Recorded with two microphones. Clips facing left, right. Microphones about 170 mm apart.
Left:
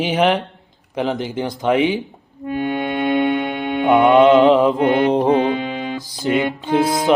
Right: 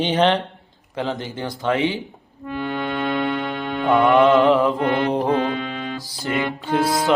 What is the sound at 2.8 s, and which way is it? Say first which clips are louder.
Music: left 5 dB; 15° left (ahead or behind).